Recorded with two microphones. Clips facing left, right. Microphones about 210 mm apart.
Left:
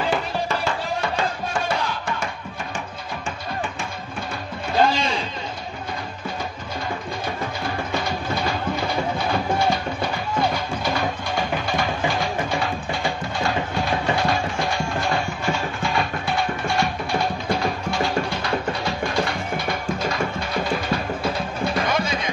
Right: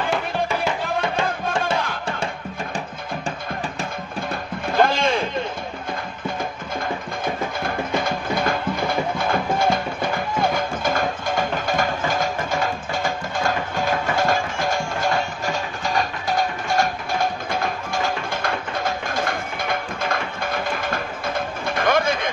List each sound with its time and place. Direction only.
0.5 s music: 15° right (ahead or behind)
4.7 s a sound: 50° right (ahead or behind)
7.6 s music: 50° right (ahead or behind)